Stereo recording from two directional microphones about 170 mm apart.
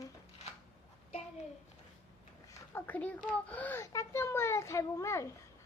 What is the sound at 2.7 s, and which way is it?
A child's voice, 10° left (ahead or behind).